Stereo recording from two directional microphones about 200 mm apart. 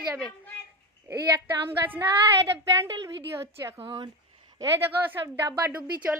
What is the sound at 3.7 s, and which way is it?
Speech, 25° right (ahead or behind).